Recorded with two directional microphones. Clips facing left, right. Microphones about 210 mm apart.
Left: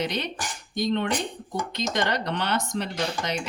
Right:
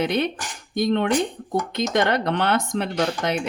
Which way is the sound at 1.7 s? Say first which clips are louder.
Right 5 dB; 55° right (ahead or behind).